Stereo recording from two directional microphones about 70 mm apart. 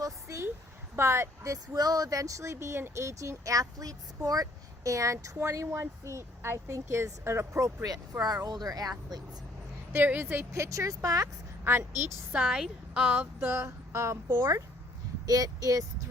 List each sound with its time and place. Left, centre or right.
0.0 s a sound: right
0.9 s speech: right
1.7 s speech: right
8.2 s speech: right
9.9 s a woman's voice: right
10.5 s speech: right
11.6 s a woman's voice: right
12.3 s a woman's voice: centre
13.4 s speech: right
13.7 s speech: right
15.3 s speech: right